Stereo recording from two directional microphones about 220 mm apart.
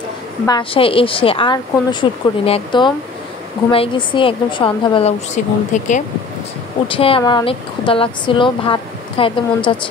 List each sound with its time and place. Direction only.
0.5 s speech: 25° left (ahead or behind)